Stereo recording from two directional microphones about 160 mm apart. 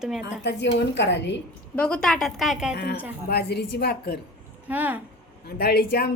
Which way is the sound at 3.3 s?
90° left.